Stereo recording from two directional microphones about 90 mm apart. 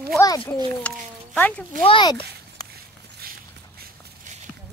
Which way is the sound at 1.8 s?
90° left.